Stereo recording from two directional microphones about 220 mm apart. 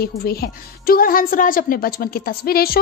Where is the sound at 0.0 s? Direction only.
45° left (ahead or behind).